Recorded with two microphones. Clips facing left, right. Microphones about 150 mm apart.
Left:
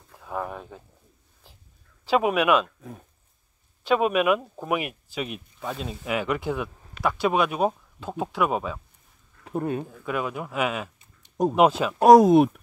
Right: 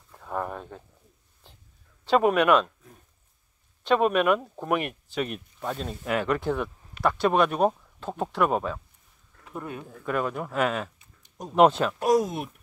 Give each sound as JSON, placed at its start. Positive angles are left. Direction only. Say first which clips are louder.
{"t": 0.2, "sound": "a sound", "louder": "even", "side_deg": 5}
{"t": 2.0, "sound": "speech", "louder": "right 1 dB", "side_deg": 5}
{"t": 3.8, "sound": "speech", "louder": "even", "side_deg": 5}
{"t": 9.4, "sound": "speech", "louder": "left 9 dB", "side_deg": 35}
{"t": 9.8, "sound": "speech", "louder": "right 1 dB", "side_deg": 5}
{"t": 12.0, "sound": "speech", "louder": "left 11 dB", "side_deg": 75}